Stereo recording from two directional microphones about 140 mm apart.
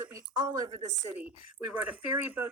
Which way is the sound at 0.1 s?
25° right (ahead or behind).